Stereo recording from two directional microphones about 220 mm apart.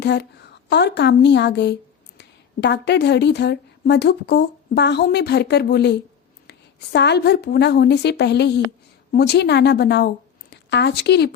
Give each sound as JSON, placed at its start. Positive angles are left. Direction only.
{"t": 0.0, "sound": "a woman's voice", "side_deg": 50}